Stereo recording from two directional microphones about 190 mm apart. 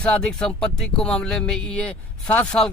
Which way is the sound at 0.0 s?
5° left (ahead or behind).